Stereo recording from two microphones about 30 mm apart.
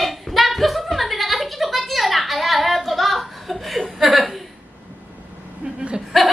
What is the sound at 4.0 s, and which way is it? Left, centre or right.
Chuckle, centre.